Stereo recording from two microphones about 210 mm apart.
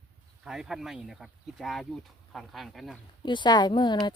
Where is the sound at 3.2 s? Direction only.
20° left (ahead or behind).